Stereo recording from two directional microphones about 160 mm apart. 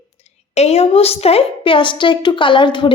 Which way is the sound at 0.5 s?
40° left (ahead or behind).